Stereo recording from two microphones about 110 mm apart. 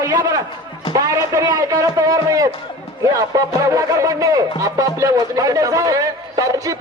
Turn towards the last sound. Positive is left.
turn(degrees=-30)  # may be behind; listen again after turning